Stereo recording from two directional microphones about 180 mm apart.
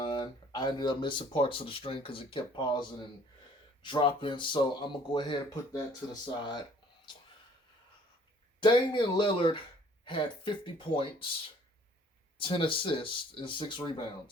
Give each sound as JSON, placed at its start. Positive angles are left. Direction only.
{"t": 0.0, "sound": "speech", "side_deg": 25}
{"t": 8.6, "sound": "speech", "side_deg": 25}
{"t": 12.4, "sound": "speech", "side_deg": 30}